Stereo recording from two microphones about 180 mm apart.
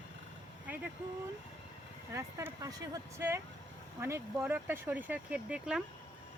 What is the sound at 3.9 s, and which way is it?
Speech, 15° right (ahead or behind).